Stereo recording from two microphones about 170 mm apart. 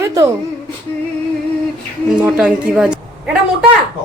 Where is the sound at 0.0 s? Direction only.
20° right (ahead or behind).